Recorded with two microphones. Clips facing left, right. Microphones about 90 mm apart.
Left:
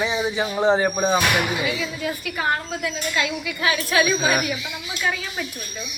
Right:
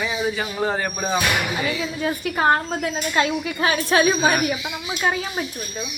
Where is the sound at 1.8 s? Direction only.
35° right (ahead or behind).